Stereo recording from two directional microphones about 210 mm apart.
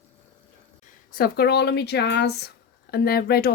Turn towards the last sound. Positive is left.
turn(degrees=50)  # may be behind; listen again after turning